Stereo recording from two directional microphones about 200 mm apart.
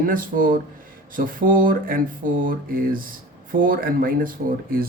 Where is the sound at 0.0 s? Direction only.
45° right (ahead or behind).